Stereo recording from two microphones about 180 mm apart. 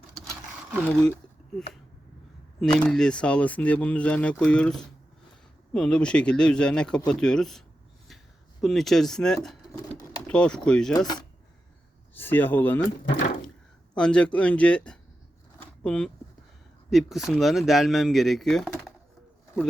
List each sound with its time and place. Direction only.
0.3 s a sound: 5° left (ahead or behind)
2.6 s speech: 5° left (ahead or behind)
8.6 s speech: centre (ahead or behind)
10.9 s speech: 25° left (ahead or behind)
12.1 s speech: 10° left (ahead or behind)
13.9 s speech: 5° left (ahead or behind)